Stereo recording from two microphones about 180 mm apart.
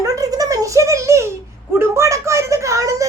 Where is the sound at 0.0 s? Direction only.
20° right (ahead or behind).